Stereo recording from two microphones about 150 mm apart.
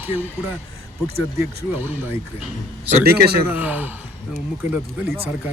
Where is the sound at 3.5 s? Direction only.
10° right (ahead or behind).